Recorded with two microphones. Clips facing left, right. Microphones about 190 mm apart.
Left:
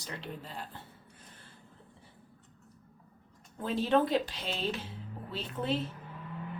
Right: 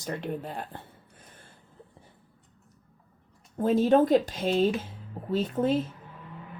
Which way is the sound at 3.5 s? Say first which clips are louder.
Right 7 dB; 45° right (ahead or behind).